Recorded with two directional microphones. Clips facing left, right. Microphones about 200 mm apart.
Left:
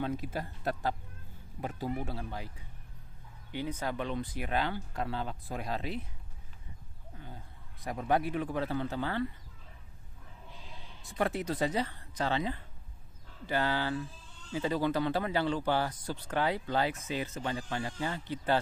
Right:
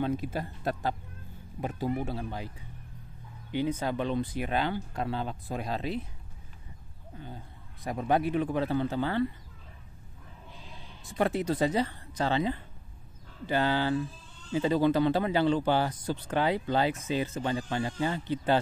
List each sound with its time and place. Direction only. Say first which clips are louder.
0.0 s speech: right 4 dB; 25° right (ahead or behind)
3.5 s speech: right 6 dB; 25° right (ahead or behind)
7.8 s speech: right 3 dB; 25° right (ahead or behind)
11.1 s speech: right 4 dB; 25° right (ahead or behind)